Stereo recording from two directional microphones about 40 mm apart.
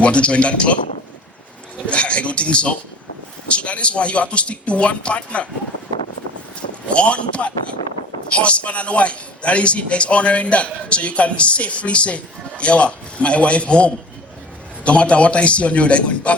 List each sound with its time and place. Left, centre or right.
0.0 s a man's voice: left
1.9 s a man's voice: left
6.8 s a man's voice: left